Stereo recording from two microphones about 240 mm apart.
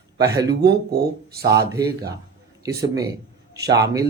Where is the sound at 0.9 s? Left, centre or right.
Right.